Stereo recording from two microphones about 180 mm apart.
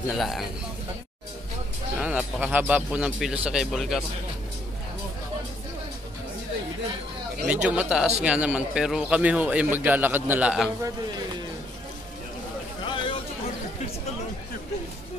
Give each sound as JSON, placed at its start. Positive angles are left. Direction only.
{"t": 0.1, "sound": "speech", "side_deg": 0}
{"t": 2.0, "sound": "speech", "side_deg": -5}
{"t": 7.4, "sound": "a man's voice", "side_deg": -5}
{"t": 12.8, "sound": "a sound", "side_deg": 25}